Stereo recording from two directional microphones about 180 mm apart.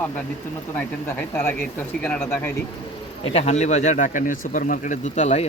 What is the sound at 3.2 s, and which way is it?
Speech, 35° left (ahead or behind).